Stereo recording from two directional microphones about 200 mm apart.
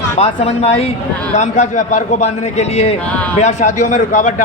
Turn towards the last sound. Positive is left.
turn(degrees=40)  # may be behind; listen again after turning